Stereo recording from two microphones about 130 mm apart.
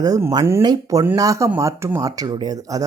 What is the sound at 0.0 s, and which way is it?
Speech, 25° right (ahead or behind).